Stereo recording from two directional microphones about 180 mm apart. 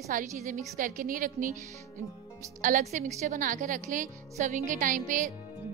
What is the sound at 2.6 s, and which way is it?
A woman's voice, 45° right (ahead or behind).